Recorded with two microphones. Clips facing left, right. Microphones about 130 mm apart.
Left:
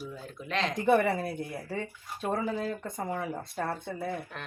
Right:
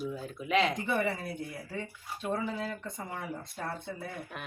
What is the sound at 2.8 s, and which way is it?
Speech, 50° left (ahead or behind).